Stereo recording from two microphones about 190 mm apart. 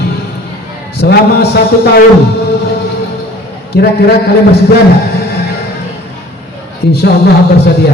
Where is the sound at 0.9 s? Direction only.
60° left (ahead or behind).